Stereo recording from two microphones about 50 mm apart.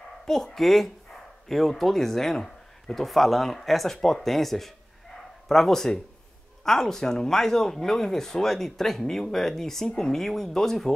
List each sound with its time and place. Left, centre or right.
0.2 s speech: centre